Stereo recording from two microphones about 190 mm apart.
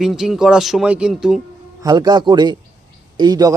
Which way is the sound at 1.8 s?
20° right (ahead or behind).